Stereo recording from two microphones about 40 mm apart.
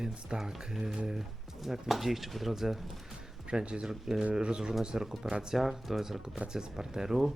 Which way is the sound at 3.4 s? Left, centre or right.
Right.